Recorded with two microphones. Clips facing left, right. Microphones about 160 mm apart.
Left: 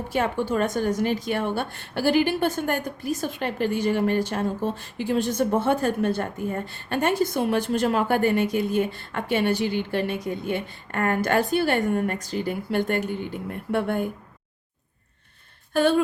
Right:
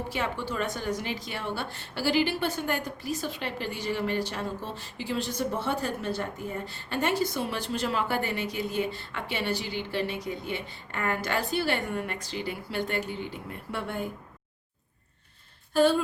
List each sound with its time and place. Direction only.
0.1 s a woman's voice: 50° left (ahead or behind)
15.7 s speech: 60° left (ahead or behind)